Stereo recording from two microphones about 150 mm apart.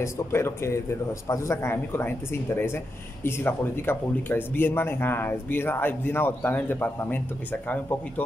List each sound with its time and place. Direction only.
0.0 s speech: 15° left (ahead or behind)